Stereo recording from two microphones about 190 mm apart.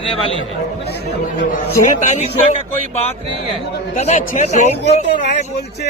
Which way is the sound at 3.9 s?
40° left (ahead or behind).